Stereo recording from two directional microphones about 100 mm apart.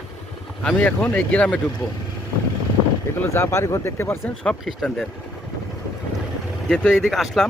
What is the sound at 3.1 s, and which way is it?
Speech, 25° left (ahead or behind).